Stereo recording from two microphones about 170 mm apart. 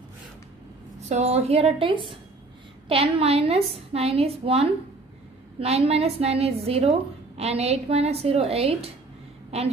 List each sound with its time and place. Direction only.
1.0 s a woman's voice: 40° right (ahead or behind)